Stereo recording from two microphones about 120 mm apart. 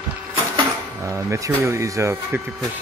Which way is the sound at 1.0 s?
25° right (ahead or behind).